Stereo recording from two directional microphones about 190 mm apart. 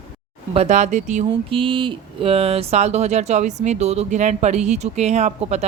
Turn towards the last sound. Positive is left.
turn(degrees=-35)  # may be behind; listen again after turning